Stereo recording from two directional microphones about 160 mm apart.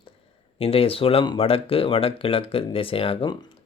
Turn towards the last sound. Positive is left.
turn(degrees=30)  # may be behind; listen again after turning